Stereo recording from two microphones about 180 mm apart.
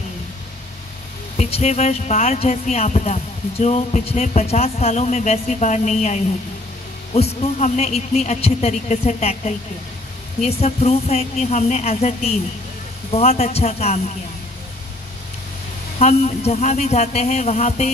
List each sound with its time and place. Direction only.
1.3 s speech: 35° left (ahead or behind)
16.0 s speech: 35° left (ahead or behind)